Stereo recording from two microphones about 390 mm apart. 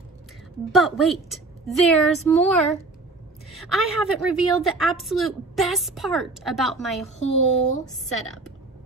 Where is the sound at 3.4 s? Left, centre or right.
Centre.